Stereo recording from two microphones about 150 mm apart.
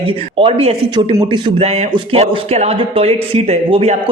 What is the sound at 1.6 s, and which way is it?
A man's voice, 45° right (ahead or behind).